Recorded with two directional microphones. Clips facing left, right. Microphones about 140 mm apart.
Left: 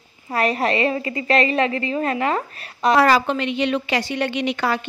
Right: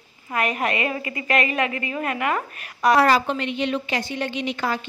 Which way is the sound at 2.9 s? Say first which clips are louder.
Left 3 dB; 90° left.